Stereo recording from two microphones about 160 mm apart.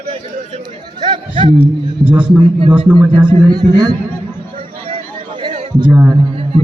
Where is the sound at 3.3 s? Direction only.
25° right (ahead or behind).